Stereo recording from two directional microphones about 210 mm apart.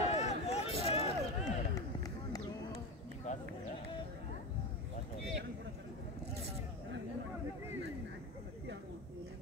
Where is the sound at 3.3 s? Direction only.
35° left (ahead or behind).